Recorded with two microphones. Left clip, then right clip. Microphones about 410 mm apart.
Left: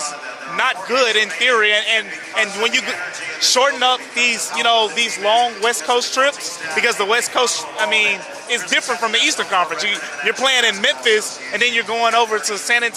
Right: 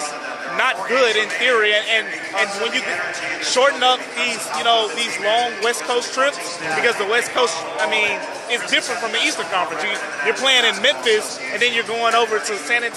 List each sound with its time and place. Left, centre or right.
0.5 s a man's voice: left